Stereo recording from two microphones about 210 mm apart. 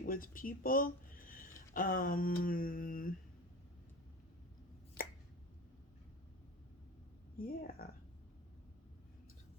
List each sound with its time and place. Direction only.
0.0 s speech: 40° left (ahead or behind)
7.3 s speech: 45° left (ahead or behind)